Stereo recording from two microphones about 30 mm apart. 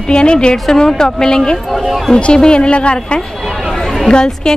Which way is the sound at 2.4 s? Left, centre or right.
Left.